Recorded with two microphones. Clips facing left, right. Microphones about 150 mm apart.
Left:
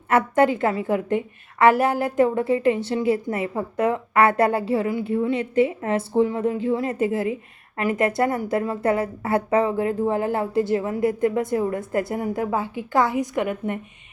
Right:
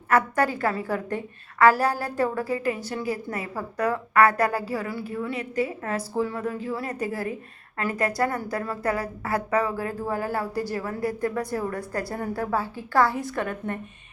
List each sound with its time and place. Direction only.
0.1 s a woman's voice: 25° left (ahead or behind)